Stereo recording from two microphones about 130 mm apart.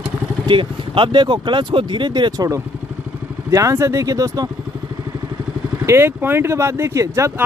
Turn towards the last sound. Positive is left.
turn(degrees=-25)  # may be behind; listen again after turning